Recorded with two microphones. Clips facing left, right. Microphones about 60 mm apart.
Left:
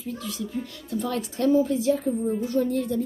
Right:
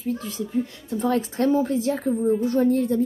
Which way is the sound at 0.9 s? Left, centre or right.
Right.